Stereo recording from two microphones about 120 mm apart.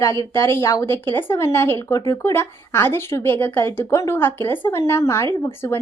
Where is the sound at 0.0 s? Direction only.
25° left (ahead or behind).